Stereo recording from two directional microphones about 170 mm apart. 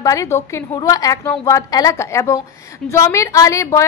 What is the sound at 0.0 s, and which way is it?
A woman's voice, 20° left (ahead or behind).